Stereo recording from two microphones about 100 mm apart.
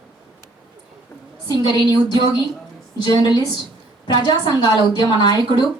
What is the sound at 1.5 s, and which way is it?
A woman's voice, 45° left (ahead or behind).